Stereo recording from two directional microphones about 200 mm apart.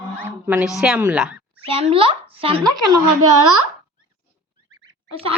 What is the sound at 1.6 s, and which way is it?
Speech, 30° right (ahead or behind).